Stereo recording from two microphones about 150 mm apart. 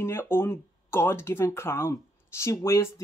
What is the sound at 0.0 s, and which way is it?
Speech, 15° left (ahead or behind).